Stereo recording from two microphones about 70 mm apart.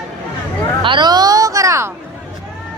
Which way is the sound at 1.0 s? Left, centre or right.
Right.